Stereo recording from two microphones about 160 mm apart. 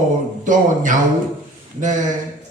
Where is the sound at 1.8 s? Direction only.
50° right (ahead or behind).